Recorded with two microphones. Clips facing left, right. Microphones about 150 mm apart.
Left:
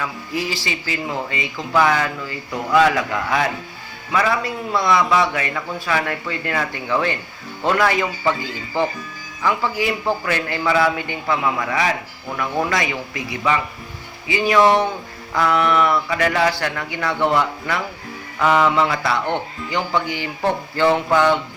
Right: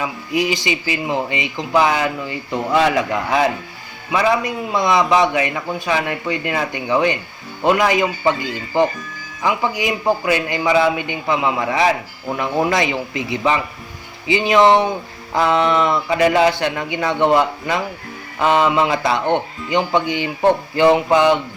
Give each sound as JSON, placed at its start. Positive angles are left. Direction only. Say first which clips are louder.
{"t": 0.0, "sound": "a man's voice", "louder": "right 5 dB", "side_deg": -15}